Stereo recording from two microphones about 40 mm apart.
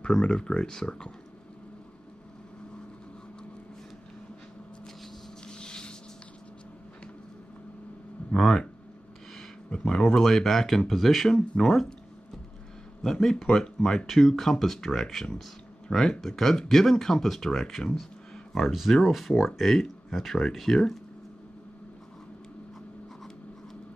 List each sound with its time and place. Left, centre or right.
0.1 s speech: left
5.5 s a sound: left
8.4 s speech: centre
9.7 s a sound: left
10.0 s speech: centre
11.2 s speech: centre
13.0 s speech: centre